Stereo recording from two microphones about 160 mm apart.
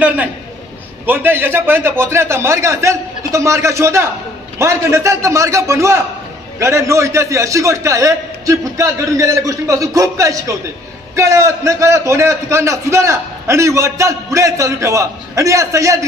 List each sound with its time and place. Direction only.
1.0 s a man's voice: 10° right (ahead or behind)